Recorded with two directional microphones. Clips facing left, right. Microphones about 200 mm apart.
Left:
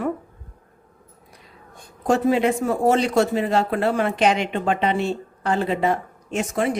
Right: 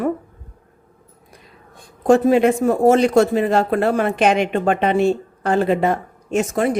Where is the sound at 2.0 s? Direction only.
50° right (ahead or behind).